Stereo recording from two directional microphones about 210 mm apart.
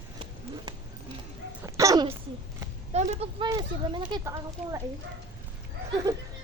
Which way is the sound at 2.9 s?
30° right (ahead or behind).